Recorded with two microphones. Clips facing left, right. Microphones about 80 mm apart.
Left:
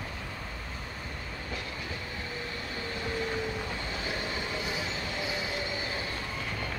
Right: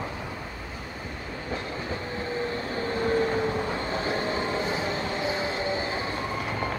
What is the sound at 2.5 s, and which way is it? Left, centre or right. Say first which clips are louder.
Train: right 8 dB; right.